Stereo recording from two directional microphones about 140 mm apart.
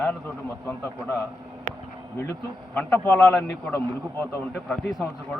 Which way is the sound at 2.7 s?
10° left (ahead or behind).